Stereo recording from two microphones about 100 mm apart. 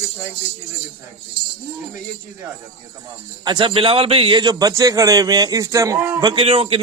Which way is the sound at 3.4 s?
50° right (ahead or behind).